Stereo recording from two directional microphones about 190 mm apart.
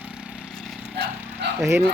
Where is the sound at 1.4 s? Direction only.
65° right (ahead or behind).